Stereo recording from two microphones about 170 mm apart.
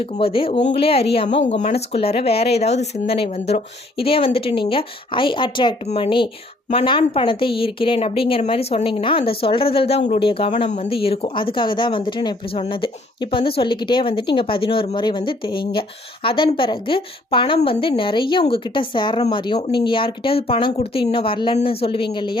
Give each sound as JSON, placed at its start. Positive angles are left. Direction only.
{"t": 0.0, "sound": "a woman's voice", "side_deg": 30}